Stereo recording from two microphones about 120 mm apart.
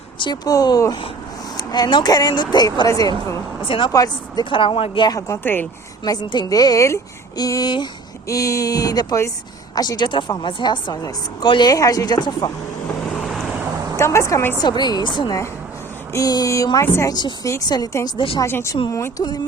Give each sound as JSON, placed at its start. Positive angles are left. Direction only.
{"t": 0.2, "sound": "speech", "side_deg": 35}
{"t": 3.6, "sound": "speech", "side_deg": 45}
{"t": 3.9, "sound": "speech", "side_deg": 30}
{"t": 4.4, "sound": "speech", "side_deg": 45}
{"t": 5.4, "sound": "speech", "side_deg": 15}
{"t": 6.1, "sound": "speech", "side_deg": 35}
{"t": 13.1, "sound": "vehicle", "side_deg": 0}
{"t": 14.0, "sound": "speech", "side_deg": 25}
{"t": 14.6, "sound": "speech", "side_deg": 35}
{"t": 16.8, "sound": "speech", "side_deg": 20}
{"t": 17.1, "sound": "speech", "side_deg": 35}
{"t": 18.4, "sound": "speech", "side_deg": 20}